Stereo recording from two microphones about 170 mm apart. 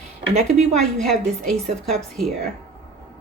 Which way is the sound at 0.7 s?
Centre (ahead or behind).